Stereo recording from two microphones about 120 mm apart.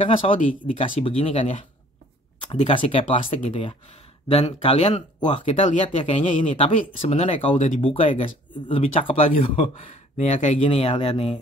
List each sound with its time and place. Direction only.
0.3 s speech: 50° left (ahead or behind)
2.7 s speech: 50° left (ahead or behind); by 4.9 s 65° left (ahead or behind)
5.2 s speech: 80° left
5.9 s speech: 50° left (ahead or behind); by 7.8 s 70° left (ahead or behind)
7.8 s speech: 50° left (ahead or behind)